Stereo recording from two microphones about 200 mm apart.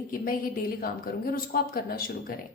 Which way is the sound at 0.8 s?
50° left (ahead or behind).